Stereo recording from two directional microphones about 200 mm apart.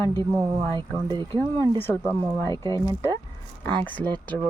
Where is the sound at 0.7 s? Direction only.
20° right (ahead or behind).